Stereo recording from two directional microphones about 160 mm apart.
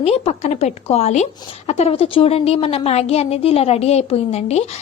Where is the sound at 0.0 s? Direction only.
40° left (ahead or behind).